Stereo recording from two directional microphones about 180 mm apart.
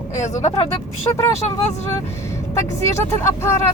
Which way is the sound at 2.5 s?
15° left (ahead or behind).